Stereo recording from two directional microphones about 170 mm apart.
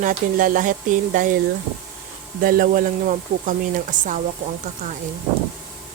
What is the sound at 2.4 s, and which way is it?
Speech, 55° right (ahead or behind).